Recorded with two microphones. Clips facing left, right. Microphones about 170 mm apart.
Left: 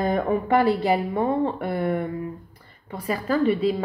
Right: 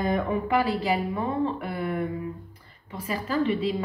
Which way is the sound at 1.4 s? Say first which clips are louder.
Left 4 dB; 50° left (ahead or behind).